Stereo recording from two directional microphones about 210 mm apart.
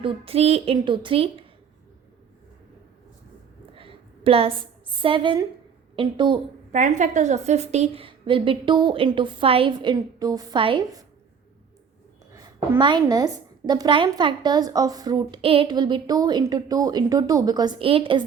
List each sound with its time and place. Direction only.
0.0 s a woman's voice: 30° right (ahead or behind)
3.8 s a sound: 25° right (ahead or behind)
5.0 s a woman's voice: 25° right (ahead or behind)
6.7 s a woman's voice: 35° right (ahead or behind)
12.3 s a woman's voice: 15° right (ahead or behind)